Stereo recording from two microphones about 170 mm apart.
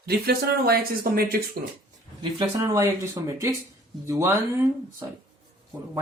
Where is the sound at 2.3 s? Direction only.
20° right (ahead or behind).